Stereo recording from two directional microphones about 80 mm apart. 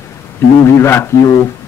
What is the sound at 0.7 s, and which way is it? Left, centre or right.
Speech, left.